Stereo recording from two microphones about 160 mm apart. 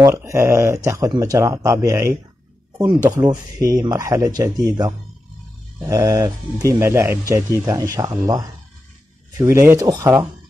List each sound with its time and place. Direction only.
0.0 s speech: 20° right (ahead or behind)